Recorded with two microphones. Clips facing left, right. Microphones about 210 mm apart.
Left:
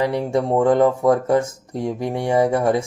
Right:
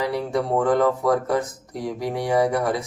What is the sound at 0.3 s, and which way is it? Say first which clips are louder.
Speech: left 3 dB; 25° left (ahead or behind).